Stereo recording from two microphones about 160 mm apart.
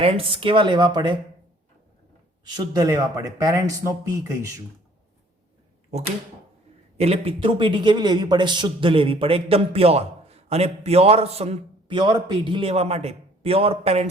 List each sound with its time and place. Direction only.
0.0 s a man's voice: 35° right (ahead or behind)
2.4 s speech: 25° right (ahead or behind)
6.9 s a man's voice: 40° right (ahead or behind)
11.9 s a man's voice: 30° right (ahead or behind)